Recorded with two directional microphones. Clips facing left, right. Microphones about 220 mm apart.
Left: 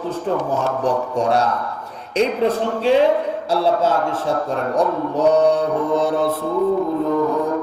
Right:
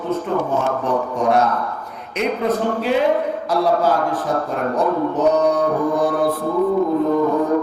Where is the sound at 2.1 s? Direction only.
30° left (ahead or behind).